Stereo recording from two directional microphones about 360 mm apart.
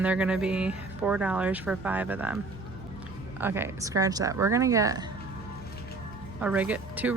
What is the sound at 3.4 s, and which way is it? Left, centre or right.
Speech, centre.